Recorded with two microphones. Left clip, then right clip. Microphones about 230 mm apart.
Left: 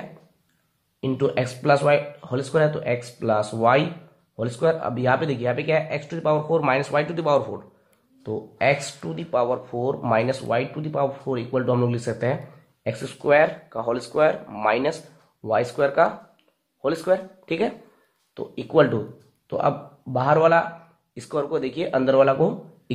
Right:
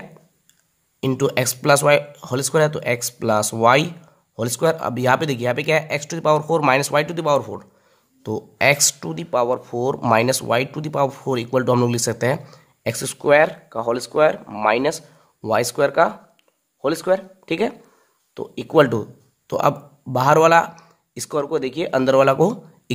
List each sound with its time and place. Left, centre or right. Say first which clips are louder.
1.0 s speech: right 3 dB; right